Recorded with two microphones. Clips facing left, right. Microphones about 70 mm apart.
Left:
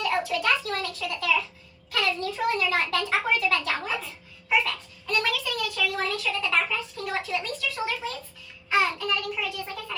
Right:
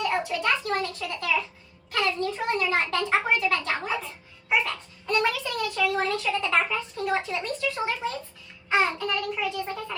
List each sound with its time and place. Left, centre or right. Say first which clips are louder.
0.0 s a child's voice: even; right